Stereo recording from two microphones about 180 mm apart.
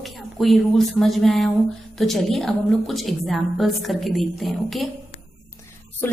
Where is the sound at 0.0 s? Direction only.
Centre (ahead or behind).